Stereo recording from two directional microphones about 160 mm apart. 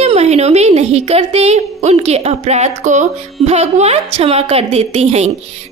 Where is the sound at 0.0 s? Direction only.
40° right (ahead or behind).